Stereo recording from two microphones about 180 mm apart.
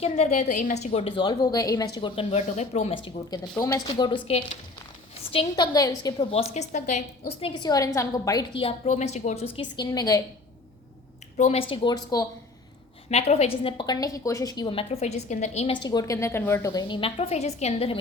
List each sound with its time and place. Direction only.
0.0 s a woman's voice: 40° left (ahead or behind); by 6.1 s 20° left (ahead or behind)
6.1 s a woman's voice: 40° left (ahead or behind); by 10.2 s 20° left (ahead or behind)
11.3 s a woman's voice: 35° left (ahead or behind)
13.1 s a woman's voice: 35° left (ahead or behind); by 16.8 s 15° left (ahead or behind)
16.9 s a woman's voice: 30° left (ahead or behind)